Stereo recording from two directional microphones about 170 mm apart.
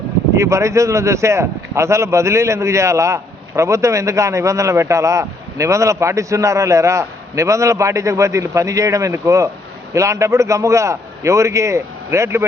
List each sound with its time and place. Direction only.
0.3 s speech: 15° right (ahead or behind)